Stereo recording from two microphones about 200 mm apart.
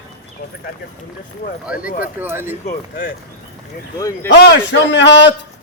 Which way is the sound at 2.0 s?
10° right (ahead or behind).